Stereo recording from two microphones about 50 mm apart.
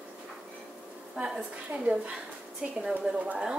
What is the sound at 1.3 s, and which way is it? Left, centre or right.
A woman's voice, centre.